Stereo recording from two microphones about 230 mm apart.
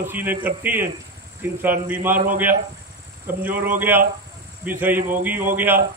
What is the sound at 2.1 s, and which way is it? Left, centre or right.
Speech, right.